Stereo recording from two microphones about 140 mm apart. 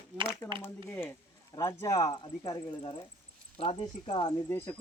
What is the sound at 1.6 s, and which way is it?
Speech, 25° left (ahead or behind).